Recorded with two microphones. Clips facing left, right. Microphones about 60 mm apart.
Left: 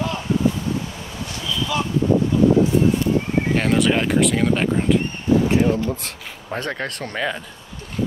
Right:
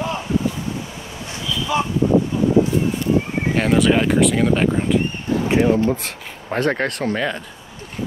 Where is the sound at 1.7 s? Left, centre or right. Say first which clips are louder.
Right 4 dB; right.